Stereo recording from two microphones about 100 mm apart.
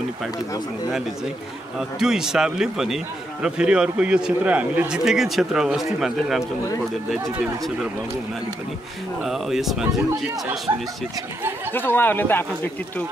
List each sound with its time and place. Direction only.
1.8 s a man's voice: 5° right (ahead or behind)
9.2 s a man's voice: 5° right (ahead or behind)
10.7 s speech: 35° right (ahead or behind)
11.7 s speech: 20° left (ahead or behind)